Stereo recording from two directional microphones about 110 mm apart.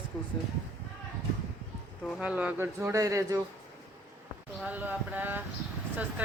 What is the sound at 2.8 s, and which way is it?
Speech, 25° right (ahead or behind).